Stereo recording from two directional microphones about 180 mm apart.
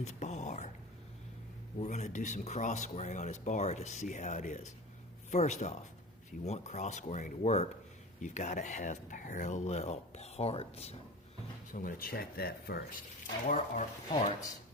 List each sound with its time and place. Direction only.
0.0 s speech: 40° left (ahead or behind)
1.8 s speech: 40° left (ahead or behind)
11.7 s speech: 50° left (ahead or behind)
13.4 s speech: 45° left (ahead or behind)